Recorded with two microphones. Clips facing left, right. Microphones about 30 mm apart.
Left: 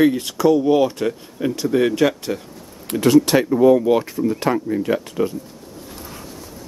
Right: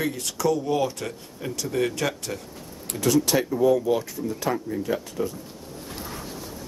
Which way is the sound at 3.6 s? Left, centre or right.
Left.